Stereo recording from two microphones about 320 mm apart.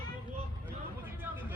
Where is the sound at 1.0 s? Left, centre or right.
Centre.